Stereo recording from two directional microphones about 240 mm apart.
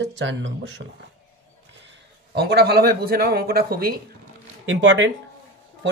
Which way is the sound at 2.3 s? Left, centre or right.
Right.